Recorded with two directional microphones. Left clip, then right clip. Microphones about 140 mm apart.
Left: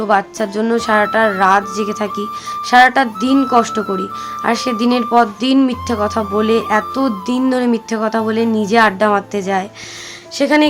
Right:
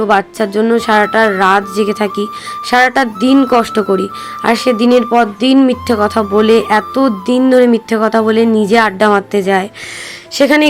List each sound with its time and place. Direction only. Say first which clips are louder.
0.0 s speech: right 3 dB; 25° right (ahead or behind); by 10.7 s 40° right (ahead or behind)